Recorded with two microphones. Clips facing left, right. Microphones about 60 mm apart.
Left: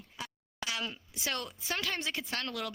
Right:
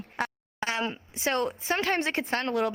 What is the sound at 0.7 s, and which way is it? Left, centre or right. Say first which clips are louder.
A woman's voice: right 7 dB; right.